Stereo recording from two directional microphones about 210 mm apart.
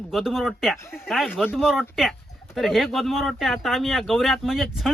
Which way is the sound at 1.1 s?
Centre (ahead or behind).